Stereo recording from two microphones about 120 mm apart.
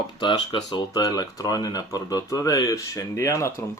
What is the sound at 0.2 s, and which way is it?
Speech, 40° left (ahead or behind).